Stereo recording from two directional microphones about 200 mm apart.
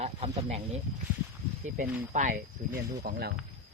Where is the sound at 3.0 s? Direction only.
50° right (ahead or behind).